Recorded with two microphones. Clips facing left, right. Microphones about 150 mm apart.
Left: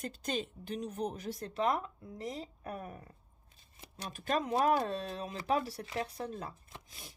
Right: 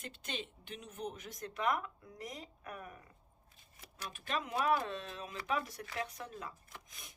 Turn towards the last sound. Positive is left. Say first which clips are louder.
# left 3 dB
turn(degrees=30)  # may be behind; listen again after turning